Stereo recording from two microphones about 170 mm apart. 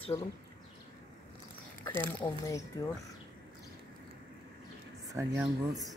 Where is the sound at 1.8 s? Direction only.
10° left (ahead or behind).